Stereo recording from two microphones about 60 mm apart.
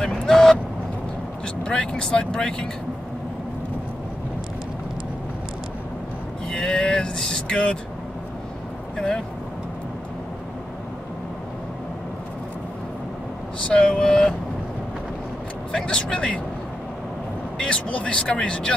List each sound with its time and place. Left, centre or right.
0.0 s vehicle: centre
1.6 s speech: centre
6.5 s speech: centre
8.9 s speech: centre
13.7 s speech: centre
15.7 s speech: centre
17.6 s speech: centre